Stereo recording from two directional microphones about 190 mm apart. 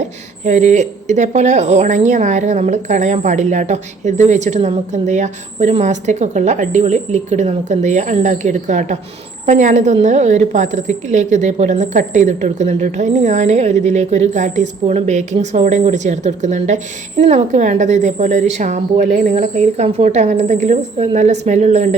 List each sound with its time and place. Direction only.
0.0 s a woman's voice: 35° right (ahead or behind)